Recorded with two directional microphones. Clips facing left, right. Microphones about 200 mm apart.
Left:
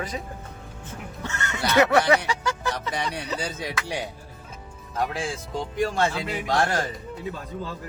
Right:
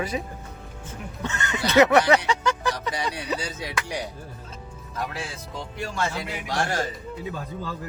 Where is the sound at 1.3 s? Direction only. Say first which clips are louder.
Right 1 dB; 15° right (ahead or behind).